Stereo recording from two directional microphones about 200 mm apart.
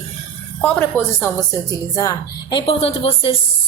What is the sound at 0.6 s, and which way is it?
A woman's voice, 5° left (ahead or behind).